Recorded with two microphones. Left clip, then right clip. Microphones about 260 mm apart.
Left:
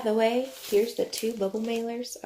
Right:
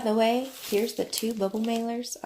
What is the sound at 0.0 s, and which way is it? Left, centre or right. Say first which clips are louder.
Speech: even; right.